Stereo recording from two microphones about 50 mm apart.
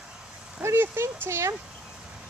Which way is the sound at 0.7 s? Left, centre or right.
Right.